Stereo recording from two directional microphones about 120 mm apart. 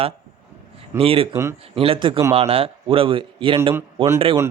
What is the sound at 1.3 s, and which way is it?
Speech, 25° right (ahead or behind).